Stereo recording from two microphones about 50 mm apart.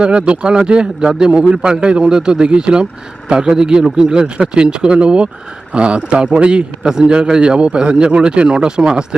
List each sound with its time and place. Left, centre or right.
0.0 s a man's voice: right